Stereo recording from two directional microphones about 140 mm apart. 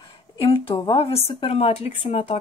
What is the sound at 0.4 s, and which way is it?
A woman's voice, 40° left (ahead or behind).